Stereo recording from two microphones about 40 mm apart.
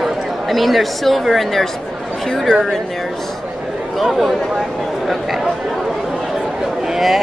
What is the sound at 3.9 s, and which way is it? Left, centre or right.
Speech, centre.